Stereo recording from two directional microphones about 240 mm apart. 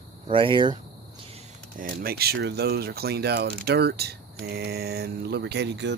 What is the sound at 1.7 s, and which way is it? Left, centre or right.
Speech, right.